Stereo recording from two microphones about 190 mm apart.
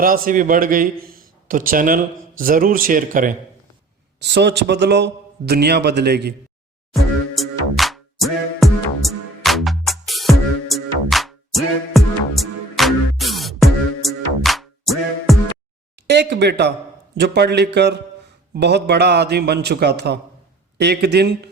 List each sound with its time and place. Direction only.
0.0 s a man's voice: 45° right (ahead or behind)
4.2 s a man's voice: 65° right (ahead or behind)
6.9 s music: centre (ahead or behind)
16.0 s a man's voice: 65° right (ahead or behind)